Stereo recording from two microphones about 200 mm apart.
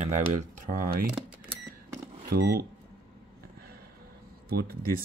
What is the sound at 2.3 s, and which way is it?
Speech, 50° right (ahead or behind).